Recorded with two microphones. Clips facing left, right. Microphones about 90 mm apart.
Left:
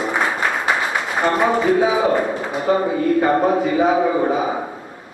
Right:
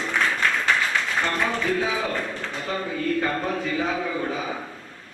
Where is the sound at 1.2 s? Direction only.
25° left (ahead or behind).